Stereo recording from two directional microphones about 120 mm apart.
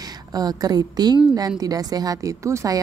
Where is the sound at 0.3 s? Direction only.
35° right (ahead or behind).